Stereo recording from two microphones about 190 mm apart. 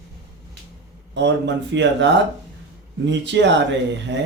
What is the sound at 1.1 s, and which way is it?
Speech, 65° right (ahead or behind).